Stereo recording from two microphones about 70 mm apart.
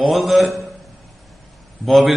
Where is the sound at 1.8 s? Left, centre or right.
Centre.